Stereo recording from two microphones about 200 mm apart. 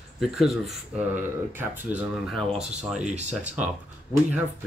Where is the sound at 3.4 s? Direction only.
5° right (ahead or behind).